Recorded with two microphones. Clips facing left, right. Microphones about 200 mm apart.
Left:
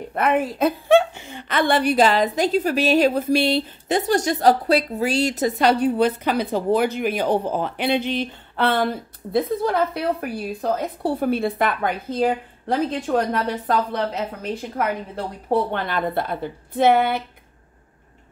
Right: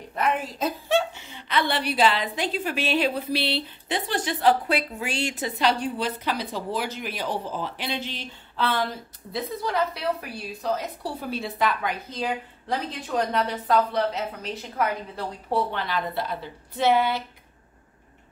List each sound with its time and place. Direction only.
0.1 s a woman's voice: 60° left (ahead or behind)